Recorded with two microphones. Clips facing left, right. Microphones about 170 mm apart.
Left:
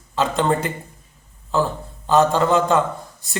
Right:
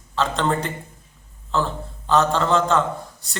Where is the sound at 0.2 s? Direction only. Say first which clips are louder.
Left 2 dB; 10° left (ahead or behind).